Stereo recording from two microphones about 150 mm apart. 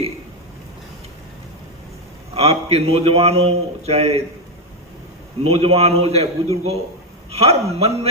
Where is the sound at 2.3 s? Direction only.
45° right (ahead or behind).